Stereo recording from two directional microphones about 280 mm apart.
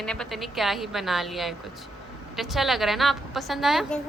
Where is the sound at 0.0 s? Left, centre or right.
Centre.